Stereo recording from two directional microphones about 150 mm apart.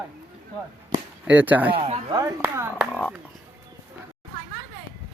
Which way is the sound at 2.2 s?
15° right (ahead or behind).